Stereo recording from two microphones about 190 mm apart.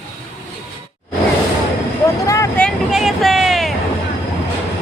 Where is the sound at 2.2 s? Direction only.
15° left (ahead or behind).